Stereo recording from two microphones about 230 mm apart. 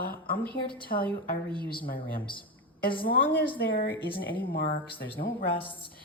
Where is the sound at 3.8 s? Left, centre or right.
Left.